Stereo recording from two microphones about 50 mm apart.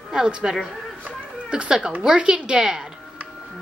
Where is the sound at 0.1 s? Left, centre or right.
Centre.